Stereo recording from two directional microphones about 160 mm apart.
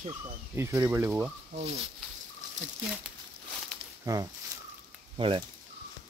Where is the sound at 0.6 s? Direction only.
15° right (ahead or behind).